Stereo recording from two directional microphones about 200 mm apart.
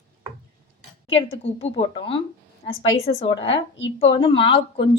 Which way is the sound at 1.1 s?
30° left (ahead or behind).